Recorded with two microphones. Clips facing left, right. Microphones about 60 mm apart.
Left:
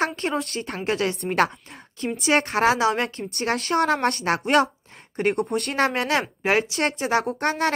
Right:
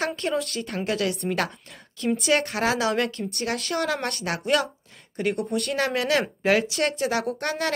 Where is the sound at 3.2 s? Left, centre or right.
Left.